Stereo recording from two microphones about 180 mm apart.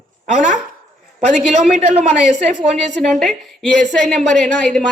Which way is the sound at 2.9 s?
Centre (ahead or behind).